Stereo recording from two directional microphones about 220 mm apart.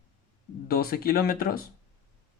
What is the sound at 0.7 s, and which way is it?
Speech, 40° left (ahead or behind).